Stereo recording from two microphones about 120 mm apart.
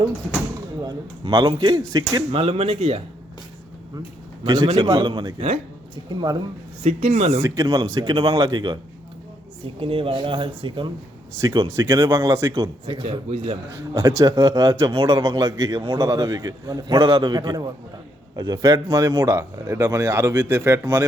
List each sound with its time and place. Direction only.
0.9 s speech: 35° right (ahead or behind)
2.3 s speech: 55° right (ahead or behind)
4.4 s speech: 35° right (ahead or behind)
6.8 s speech: 60° right (ahead or behind)
7.4 s speech: 25° right (ahead or behind)
9.6 s a man's voice: 45° right (ahead or behind); by 12.7 s 25° right (ahead or behind)
12.8 s speech: 45° right (ahead or behind)
13.7 s a man's voice: 25° right (ahead or behind)